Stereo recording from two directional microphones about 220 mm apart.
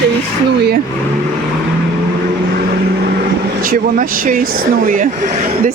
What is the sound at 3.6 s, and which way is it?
Speech, 35° right (ahead or behind).